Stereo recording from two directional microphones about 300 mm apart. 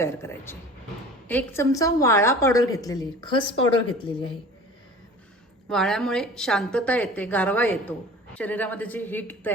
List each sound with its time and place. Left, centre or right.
0.0 s a woman's voice: centre
5.6 s a woman's voice: centre